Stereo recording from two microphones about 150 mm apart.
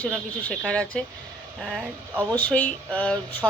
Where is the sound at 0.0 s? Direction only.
10° left (ahead or behind).